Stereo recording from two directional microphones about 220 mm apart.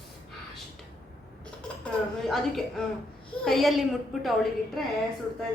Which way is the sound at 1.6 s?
5° left (ahead or behind).